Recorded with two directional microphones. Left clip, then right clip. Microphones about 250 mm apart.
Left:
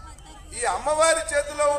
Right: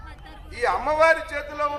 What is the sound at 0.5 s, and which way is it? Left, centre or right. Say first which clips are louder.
A man's voice: right 2 dB; left.